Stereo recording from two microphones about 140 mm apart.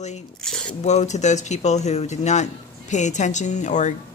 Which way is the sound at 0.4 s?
5° left (ahead or behind).